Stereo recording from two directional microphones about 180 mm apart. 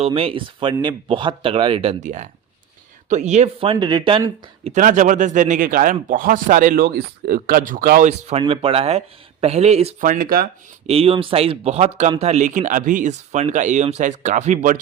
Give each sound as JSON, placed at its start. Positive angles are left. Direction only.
{"t": 0.0, "sound": "speech", "side_deg": -30}
{"t": 4.6, "sound": "speech", "side_deg": -45}
{"t": 8.3, "sound": "speech", "side_deg": -30}
{"t": 10.0, "sound": "speech", "side_deg": -50}
{"t": 10.8, "sound": "speech", "side_deg": -30}